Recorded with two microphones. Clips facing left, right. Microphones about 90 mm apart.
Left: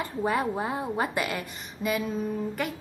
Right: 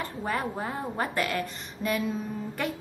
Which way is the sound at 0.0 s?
15° left (ahead or behind).